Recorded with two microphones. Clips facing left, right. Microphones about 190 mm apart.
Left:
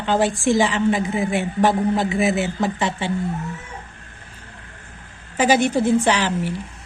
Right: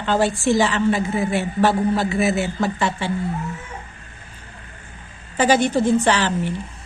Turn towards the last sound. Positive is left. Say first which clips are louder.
# even
turn(degrees=10)  # may be behind; listen again after turning